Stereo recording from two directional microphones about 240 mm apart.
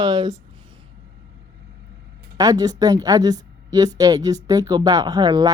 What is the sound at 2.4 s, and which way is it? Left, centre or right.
Speech, centre.